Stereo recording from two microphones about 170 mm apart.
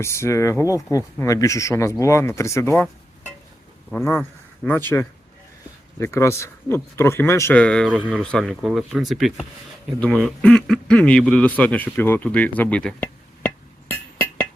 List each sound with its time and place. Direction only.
0.0 s speech: 15° left (ahead or behind)
3.9 s speech: 5° left (ahead or behind)
13.9 s chink: 10° left (ahead or behind)